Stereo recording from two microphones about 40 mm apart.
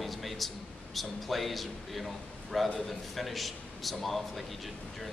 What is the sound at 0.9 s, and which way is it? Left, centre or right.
A man's voice, centre.